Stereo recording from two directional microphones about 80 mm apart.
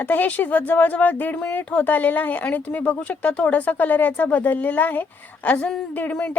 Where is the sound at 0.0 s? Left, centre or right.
Left.